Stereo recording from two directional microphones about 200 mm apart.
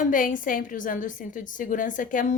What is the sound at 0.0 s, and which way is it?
A woman's voice, 40° left (ahead or behind).